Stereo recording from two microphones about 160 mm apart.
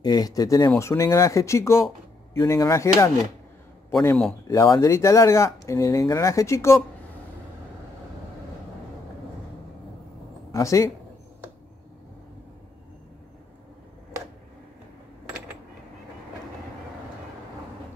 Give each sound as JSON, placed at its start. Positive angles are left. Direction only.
{"t": 0.0, "sound": "speech", "side_deg": 25}
{"t": 4.5, "sound": "speech", "side_deg": 20}
{"t": 10.5, "sound": "speech", "side_deg": 20}